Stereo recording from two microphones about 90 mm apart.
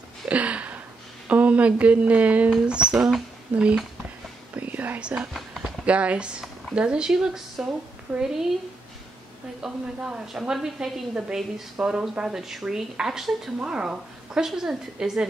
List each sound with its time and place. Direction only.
0.3 s a sound: 15° right (ahead or behind)
1.3 s a woman's voice: 15° right (ahead or behind)
4.6 s whispering: 20° right (ahead or behind)
5.9 s a woman's voice: 15° right (ahead or behind)
9.6 s a woman's voice: 5° right (ahead or behind)